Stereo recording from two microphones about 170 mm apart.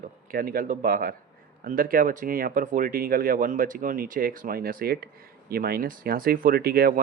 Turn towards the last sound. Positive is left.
turn(degrees=-65)  # may be behind; listen again after turning